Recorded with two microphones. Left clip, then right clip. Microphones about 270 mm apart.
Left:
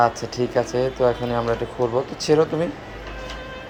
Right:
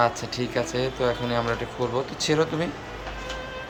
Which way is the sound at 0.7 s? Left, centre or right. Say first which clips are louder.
Left 5 dB; centre.